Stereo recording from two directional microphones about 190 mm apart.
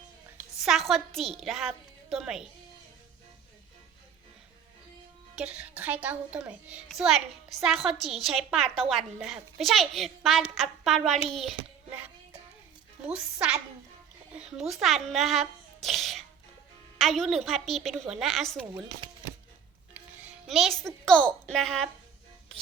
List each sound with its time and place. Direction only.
0.6 s a woman's voice: centre (ahead or behind)
5.4 s a woman's voice: 5° right (ahead or behind)
11.3 s child singing: 5° right (ahead or behind)
13.1 s a child's voice: 5° right (ahead or behind)
18.7 s speech: 20° right (ahead or behind)
19.9 s speech: 5° right (ahead or behind)